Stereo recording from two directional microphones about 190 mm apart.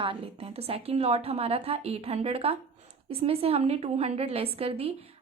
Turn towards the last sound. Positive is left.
turn(degrees=-30)  # may be behind; listen again after turning